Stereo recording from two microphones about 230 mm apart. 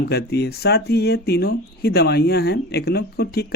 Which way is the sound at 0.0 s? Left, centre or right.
Left.